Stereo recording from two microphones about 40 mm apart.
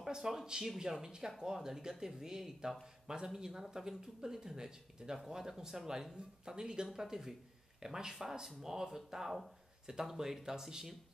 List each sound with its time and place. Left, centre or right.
0.0 s speech: centre